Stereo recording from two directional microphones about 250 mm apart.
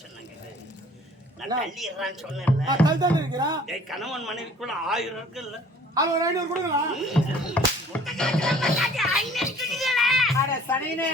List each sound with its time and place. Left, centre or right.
1.7 s a man's voice: centre
2.6 s a woman's voice: centre
3.7 s a man's voice: centre
5.9 s a woman's voice: centre
7.1 s music: centre
10.3 s speech: centre